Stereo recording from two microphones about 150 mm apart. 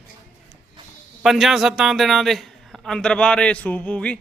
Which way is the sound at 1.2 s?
Centre (ahead or behind).